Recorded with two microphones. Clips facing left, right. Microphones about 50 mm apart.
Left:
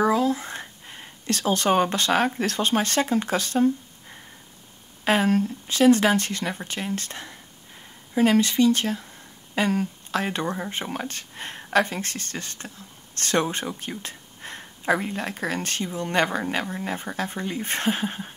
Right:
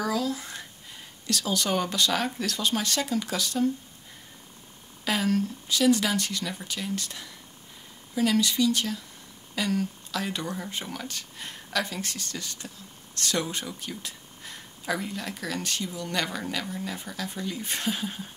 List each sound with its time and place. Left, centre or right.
0.0 s speech: left
5.0 s speech: left